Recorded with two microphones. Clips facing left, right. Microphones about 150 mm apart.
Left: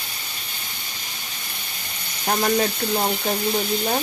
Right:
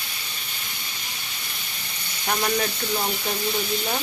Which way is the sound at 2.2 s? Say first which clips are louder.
Left 4 dB; 40° left (ahead or behind).